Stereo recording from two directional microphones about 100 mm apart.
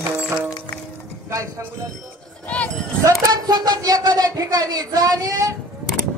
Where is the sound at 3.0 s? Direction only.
35° right (ahead or behind).